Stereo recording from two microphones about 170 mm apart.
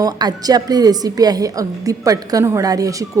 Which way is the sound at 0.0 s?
25° right (ahead or behind).